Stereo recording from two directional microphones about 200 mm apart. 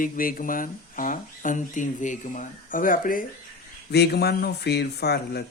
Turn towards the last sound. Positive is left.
turn(degrees=55)  # may be behind; listen again after turning